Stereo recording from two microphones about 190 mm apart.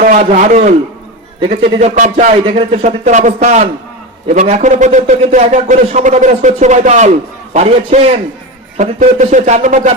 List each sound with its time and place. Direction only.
0.0 s a man's voice: 40° right (ahead or behind)